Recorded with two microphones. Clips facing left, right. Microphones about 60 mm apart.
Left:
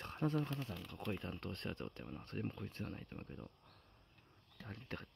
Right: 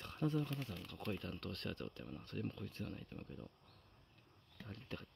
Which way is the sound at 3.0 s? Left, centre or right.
Left.